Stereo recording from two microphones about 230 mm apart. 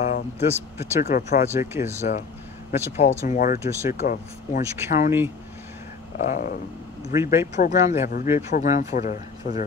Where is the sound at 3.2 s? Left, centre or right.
Left.